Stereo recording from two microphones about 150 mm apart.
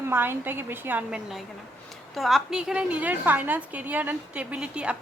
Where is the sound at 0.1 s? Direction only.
15° right (ahead or behind).